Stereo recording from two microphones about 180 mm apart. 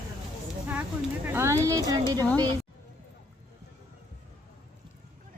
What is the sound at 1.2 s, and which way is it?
Speech, 15° right (ahead or behind).